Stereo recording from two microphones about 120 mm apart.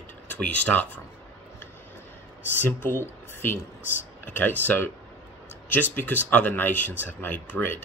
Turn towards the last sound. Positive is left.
turn(degrees=15)  # may be behind; listen again after turning